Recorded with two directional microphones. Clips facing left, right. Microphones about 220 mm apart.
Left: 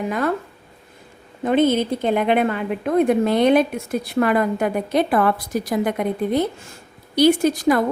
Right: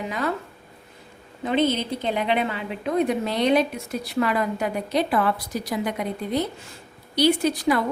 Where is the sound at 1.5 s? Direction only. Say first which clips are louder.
Left 5 dB; 50° left (ahead or behind).